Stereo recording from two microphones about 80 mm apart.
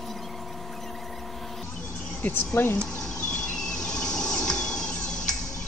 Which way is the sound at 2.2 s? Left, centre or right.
Left.